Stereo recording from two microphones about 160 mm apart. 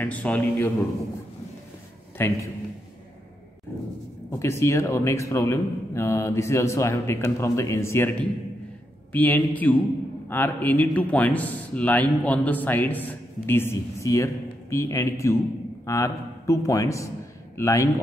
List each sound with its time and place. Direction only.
0.0 s a man's voice: 10° left (ahead or behind)
2.1 s a man's voice: 15° left (ahead or behind)
4.3 s a man's voice: 15° left (ahead or behind)